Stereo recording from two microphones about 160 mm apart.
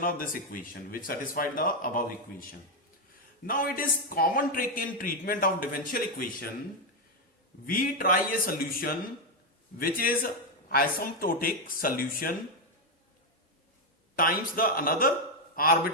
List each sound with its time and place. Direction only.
0.0 s a man's voice: 60° left (ahead or behind)
7.7 s a man's voice: 65° left (ahead or behind)
14.2 s a man's voice: 65° left (ahead or behind)